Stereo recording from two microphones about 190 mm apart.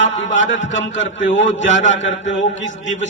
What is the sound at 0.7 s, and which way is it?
Speech, 75° left (ahead or behind).